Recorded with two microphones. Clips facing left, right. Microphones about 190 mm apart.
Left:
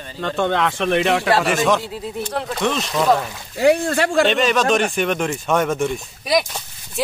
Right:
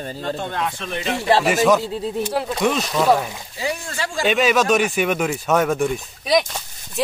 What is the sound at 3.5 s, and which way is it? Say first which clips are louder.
Speech: left 11 dB; 65° left (ahead or behind).